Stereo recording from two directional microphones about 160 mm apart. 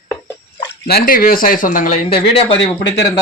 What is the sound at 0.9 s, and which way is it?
Speech, 65° left (ahead or behind).